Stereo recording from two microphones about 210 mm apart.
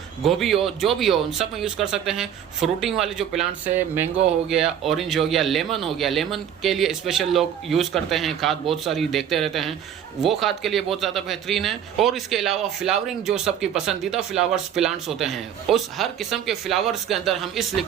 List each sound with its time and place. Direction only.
0.2 s speech: centre (ahead or behind)